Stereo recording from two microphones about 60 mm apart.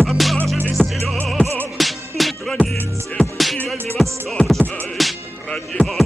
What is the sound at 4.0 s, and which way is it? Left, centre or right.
Music, centre.